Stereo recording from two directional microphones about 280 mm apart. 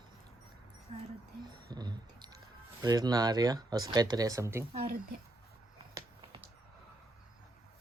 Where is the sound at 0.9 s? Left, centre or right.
Right.